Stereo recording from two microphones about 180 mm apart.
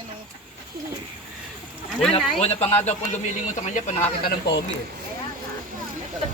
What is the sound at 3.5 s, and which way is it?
Speech, 45° left (ahead or behind).